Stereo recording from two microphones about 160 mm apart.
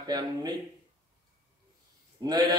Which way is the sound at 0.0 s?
25° right (ahead or behind).